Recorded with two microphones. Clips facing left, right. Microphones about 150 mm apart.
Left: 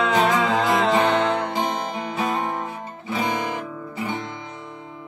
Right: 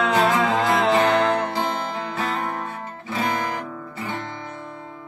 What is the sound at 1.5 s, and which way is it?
Guitar, 15° left (ahead or behind).